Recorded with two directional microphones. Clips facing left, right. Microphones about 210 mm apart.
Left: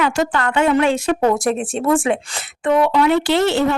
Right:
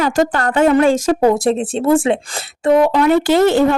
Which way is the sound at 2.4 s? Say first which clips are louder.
Right 5 dB; 40° right (ahead or behind).